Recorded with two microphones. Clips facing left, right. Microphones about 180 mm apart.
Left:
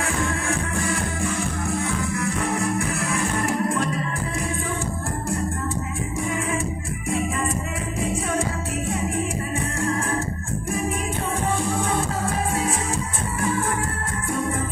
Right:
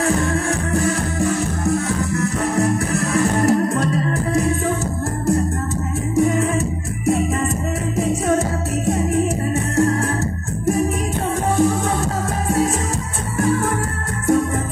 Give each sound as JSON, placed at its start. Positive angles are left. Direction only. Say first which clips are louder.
{"t": 0.0, "sound": "music", "louder": "right 7 dB", "side_deg": -40}
{"t": 6.1, "sound": "music", "louder": "right 11 dB", "side_deg": -40}
{"t": 8.1, "sound": "music", "louder": "right 7 dB", "side_deg": -40}